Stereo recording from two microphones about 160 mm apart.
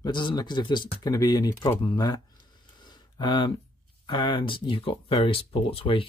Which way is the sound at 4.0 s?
30° left (ahead or behind).